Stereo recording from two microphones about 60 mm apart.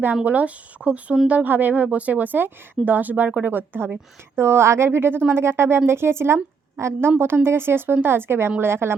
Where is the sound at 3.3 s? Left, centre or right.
Centre.